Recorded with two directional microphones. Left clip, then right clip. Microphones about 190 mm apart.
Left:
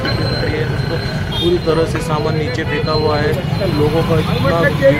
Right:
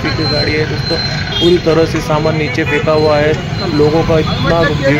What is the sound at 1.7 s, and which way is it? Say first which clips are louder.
Speech: right 4 dB; 20° right (ahead or behind).